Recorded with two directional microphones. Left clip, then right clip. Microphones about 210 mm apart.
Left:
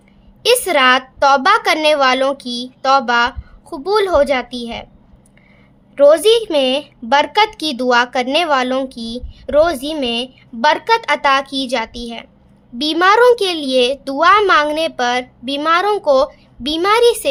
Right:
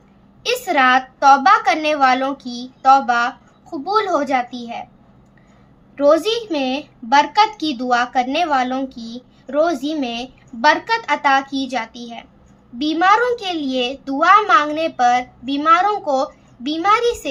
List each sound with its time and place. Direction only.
0.4 s a woman's voice: 55° left (ahead or behind)
6.0 s a woman's voice: 60° left (ahead or behind)